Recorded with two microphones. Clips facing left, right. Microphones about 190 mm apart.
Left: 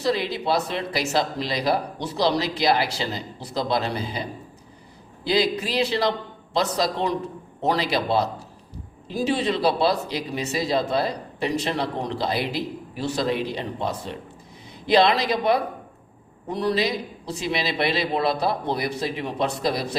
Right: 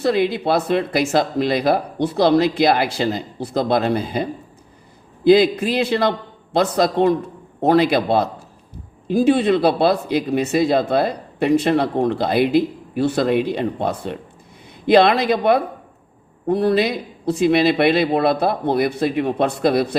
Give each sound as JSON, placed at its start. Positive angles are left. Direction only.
{"t": 0.0, "sound": "speech", "side_deg": -55}